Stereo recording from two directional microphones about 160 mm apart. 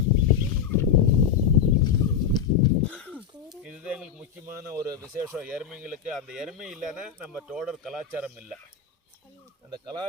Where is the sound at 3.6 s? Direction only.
5° right (ahead or behind).